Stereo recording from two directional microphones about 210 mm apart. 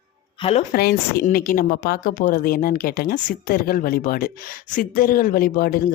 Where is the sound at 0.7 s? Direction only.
50° left (ahead or behind).